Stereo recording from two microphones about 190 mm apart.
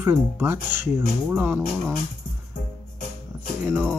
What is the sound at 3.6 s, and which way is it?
Speech, 10° right (ahead or behind).